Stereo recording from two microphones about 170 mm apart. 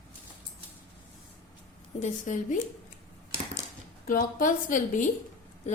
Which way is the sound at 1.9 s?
45° left (ahead or behind).